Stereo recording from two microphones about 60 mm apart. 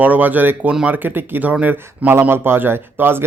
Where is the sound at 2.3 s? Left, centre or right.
Right.